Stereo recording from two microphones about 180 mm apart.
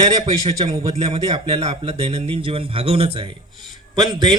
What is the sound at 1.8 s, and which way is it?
A man's voice, 35° right (ahead or behind).